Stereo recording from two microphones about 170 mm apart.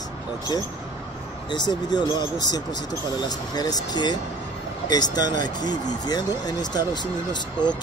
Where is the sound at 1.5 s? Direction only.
25° left (ahead or behind).